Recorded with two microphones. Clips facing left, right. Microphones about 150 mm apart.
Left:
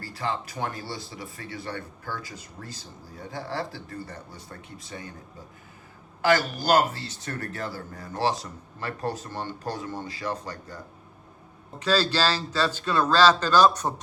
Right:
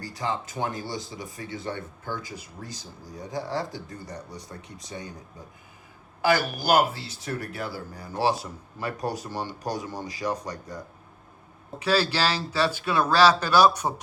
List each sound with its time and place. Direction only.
0.0 s speech: 20° right (ahead or behind)
6.2 s speech: 10° right (ahead or behind)
11.8 s speech: 10° right (ahead or behind)